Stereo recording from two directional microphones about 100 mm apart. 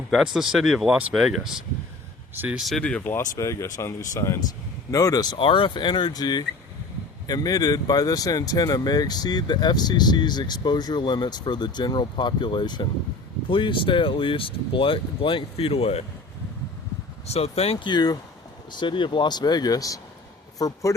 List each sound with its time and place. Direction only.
0.1 s speech: 5° right (ahead or behind)
2.3 s speech: 20° right (ahead or behind)
2.6 s speech: centre (ahead or behind)
2.8 s speech: 15° left (ahead or behind)
3.2 s speech: 30° left (ahead or behind)
5.4 s speech: 55° left (ahead or behind); by 16.0 s 85° left
17.2 s speech: 90° left
17.7 s speech: 50° left (ahead or behind)